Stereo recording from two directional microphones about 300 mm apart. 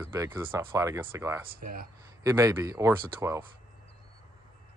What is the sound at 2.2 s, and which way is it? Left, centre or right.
Speech, centre.